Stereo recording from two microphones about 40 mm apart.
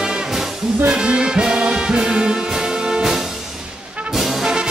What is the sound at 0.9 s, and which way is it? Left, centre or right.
Brass instrument, right.